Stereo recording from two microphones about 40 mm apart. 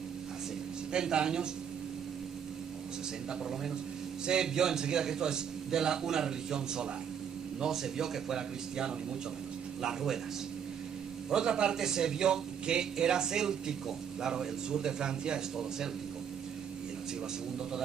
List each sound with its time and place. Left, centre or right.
0.9 s a man's voice: centre
4.3 s a man's voice: centre
11.2 s a man's voice: centre